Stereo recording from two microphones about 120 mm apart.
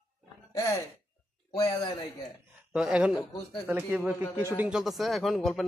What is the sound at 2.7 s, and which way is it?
Speech, 5° right (ahead or behind).